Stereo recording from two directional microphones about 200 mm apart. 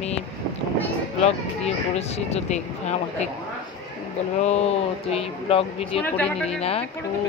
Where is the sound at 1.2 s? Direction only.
30° left (ahead or behind).